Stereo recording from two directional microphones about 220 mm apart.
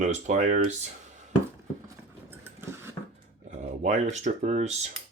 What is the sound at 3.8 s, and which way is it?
Speech, 35° right (ahead or behind).